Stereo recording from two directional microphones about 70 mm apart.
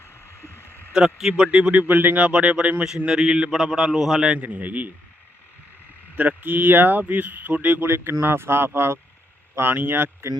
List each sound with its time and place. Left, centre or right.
0.0 s a sound: left
0.9 s speech: centre
4.4 s speech: right
6.1 s speech: right
7.8 s speech: right